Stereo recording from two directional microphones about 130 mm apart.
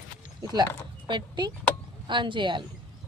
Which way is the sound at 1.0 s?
35° right (ahead or behind).